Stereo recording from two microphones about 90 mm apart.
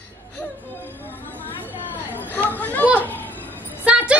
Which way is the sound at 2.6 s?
20° left (ahead or behind).